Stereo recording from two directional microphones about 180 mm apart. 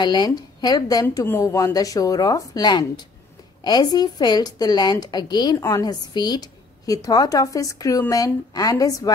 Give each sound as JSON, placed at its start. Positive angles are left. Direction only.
{"t": 0.0, "sound": "a woman's voice", "side_deg": 25}